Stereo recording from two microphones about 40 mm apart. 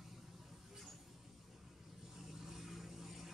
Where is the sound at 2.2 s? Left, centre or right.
Centre.